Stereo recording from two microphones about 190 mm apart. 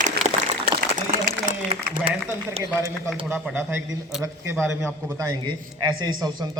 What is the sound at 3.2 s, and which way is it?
A man's voice, 10° right (ahead or behind).